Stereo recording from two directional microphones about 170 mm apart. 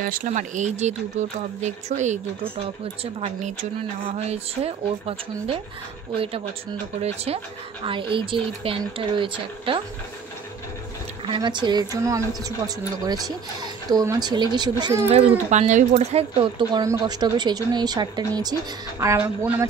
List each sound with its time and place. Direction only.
0.0 s speech: 55° right (ahead or behind); by 6.4 s 35° right (ahead or behind)
7.8 s speech: 30° right (ahead or behind)
11.2 s speech: 25° right (ahead or behind)
15.0 s speech: 40° right (ahead or behind)
16.8 s speech: 20° right (ahead or behind)